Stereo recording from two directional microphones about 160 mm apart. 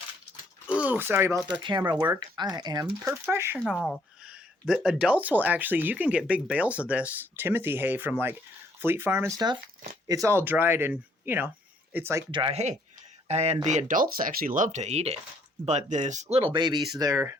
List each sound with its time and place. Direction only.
0.8 s speech: 10° right (ahead or behind)
2.1 s speech: 25° right (ahead or behind)
3.6 s speech: 5° left (ahead or behind)
4.2 s speech: 5° right (ahead or behind)
9.3 s speech: 25° right (ahead or behind)
12.3 s speech: 30° right (ahead or behind)